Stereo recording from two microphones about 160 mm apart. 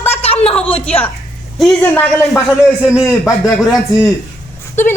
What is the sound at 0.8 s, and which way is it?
A woman's voice, 10° left (ahead or behind).